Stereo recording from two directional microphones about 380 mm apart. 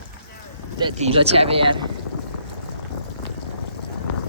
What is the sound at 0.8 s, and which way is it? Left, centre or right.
Speech, centre.